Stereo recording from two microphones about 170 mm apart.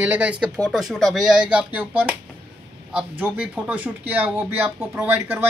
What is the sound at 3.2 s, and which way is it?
Speech, 10° right (ahead or behind).